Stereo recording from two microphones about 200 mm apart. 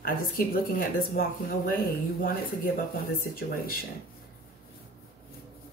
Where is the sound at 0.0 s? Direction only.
45° left (ahead or behind).